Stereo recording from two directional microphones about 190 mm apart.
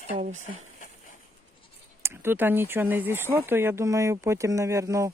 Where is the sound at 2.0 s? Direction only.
10° right (ahead or behind).